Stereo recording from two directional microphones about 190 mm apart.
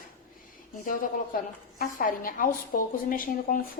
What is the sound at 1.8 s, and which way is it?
A woman's voice, 45° left (ahead or behind).